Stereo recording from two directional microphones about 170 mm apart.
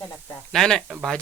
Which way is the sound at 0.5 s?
Centre (ahead or behind).